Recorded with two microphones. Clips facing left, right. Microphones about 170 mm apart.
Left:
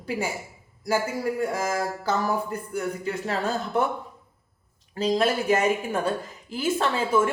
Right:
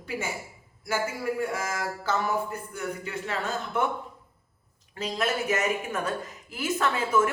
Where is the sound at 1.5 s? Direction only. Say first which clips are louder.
Left 5 dB; 35° left (ahead or behind).